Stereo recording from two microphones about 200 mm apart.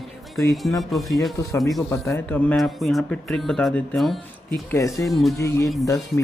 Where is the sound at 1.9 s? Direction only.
10° left (ahead or behind).